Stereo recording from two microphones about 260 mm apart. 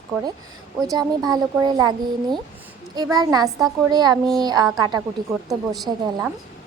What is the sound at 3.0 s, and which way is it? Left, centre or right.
A woman's voice, centre.